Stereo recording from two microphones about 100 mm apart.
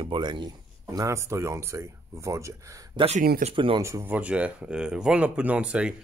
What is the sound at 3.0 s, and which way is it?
Speech, 90° right.